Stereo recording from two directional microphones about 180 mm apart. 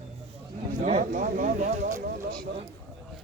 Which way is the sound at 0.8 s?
40° right (ahead or behind).